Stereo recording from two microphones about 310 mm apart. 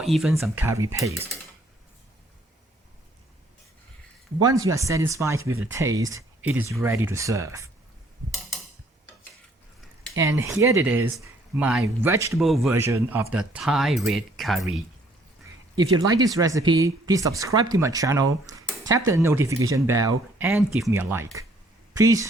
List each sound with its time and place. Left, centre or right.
0.0 s speech: centre
4.4 s speech: centre
5.4 s speech: right
5.7 s speech: centre
10.2 s speech: centre
15.7 s speech: centre